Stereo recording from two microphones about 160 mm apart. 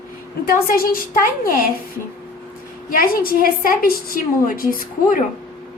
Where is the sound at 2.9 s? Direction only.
65° left (ahead or behind).